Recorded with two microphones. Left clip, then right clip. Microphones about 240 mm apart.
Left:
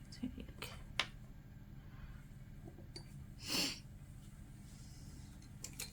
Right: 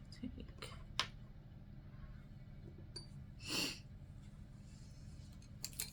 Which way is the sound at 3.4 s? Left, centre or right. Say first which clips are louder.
Left 2 dB; left.